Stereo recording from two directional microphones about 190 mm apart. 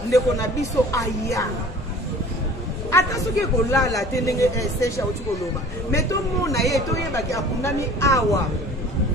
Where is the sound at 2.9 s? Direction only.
15° left (ahead or behind).